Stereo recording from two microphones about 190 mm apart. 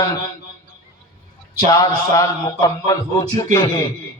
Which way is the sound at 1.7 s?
20° left (ahead or behind).